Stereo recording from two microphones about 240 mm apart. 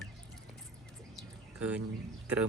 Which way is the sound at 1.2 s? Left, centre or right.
Centre.